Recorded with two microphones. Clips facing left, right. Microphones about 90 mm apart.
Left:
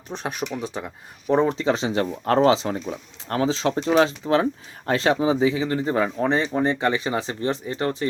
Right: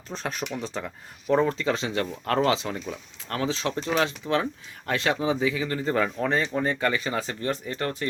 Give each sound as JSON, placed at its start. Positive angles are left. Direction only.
{"t": 0.1, "sound": "speech", "side_deg": 15}